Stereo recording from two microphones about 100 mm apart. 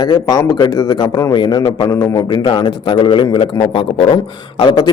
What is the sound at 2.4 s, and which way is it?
A man's voice, 55° left (ahead or behind).